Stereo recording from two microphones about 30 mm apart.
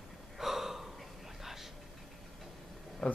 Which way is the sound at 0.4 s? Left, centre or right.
Centre.